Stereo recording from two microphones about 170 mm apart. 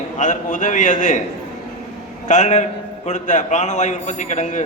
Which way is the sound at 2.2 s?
45° left (ahead or behind).